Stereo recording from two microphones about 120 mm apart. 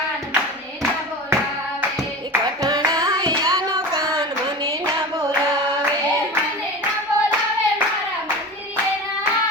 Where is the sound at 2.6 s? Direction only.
30° right (ahead or behind).